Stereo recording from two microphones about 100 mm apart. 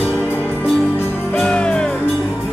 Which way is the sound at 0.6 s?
10° left (ahead or behind).